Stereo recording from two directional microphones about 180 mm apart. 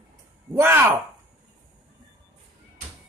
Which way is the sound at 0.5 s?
15° right (ahead or behind).